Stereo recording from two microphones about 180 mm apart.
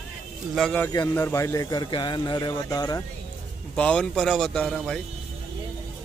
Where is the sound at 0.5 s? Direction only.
5° left (ahead or behind); by 3.0 s 20° left (ahead or behind).